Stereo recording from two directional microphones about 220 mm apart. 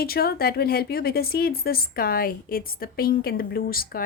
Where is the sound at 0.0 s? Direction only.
45° left (ahead or behind).